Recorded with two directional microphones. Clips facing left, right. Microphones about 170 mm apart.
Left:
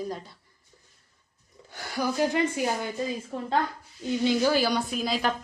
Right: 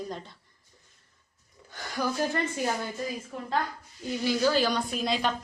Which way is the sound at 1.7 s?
10° left (ahead or behind).